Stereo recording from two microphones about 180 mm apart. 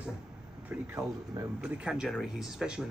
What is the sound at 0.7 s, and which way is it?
Speech, 10° right (ahead or behind).